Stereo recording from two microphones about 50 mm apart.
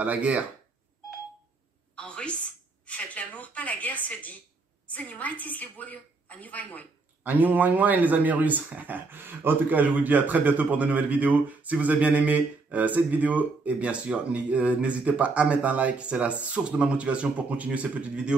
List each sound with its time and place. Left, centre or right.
0.0 s a man's voice: right
2.0 s a sound: left
4.8 s a woman's voice: left
7.2 s speech: right
9.7 s a man's voice: right